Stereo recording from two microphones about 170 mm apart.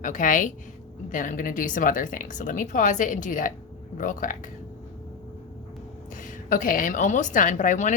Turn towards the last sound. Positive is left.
turn(degrees=45)  # may be behind; listen again after turning